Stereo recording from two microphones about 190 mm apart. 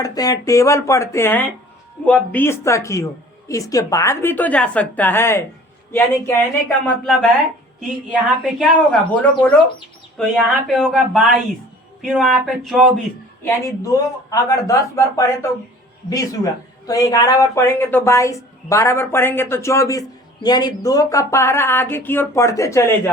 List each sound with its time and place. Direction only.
0.0 s speech: 20° left (ahead or behind)
8.5 s speech: centre (ahead or behind)
13.4 s speech: 15° left (ahead or behind)